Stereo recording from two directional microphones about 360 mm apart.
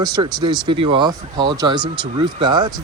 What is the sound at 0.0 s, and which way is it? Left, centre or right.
Speech, centre.